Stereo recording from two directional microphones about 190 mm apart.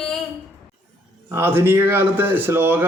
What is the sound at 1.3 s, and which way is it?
Speech, 10° right (ahead or behind).